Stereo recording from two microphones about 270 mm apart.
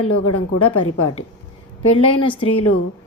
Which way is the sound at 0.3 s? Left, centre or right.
Left.